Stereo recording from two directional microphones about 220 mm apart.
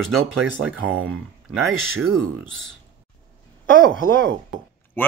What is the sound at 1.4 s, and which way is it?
Speech, centre (ahead or behind).